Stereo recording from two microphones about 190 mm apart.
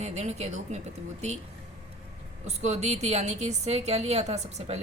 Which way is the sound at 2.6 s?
35° right (ahead or behind).